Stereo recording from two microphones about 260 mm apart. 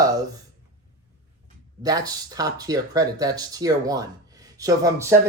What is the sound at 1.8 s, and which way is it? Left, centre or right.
Speech, centre.